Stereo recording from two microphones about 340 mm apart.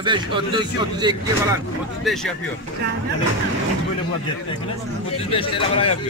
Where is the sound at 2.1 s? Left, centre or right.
Centre.